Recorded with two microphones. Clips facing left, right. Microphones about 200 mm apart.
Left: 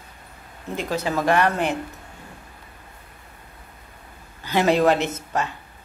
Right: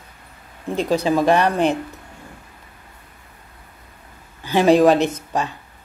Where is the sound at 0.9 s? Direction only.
15° right (ahead or behind).